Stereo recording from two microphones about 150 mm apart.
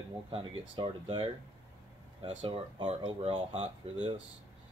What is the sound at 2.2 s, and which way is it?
Speech, 35° right (ahead or behind).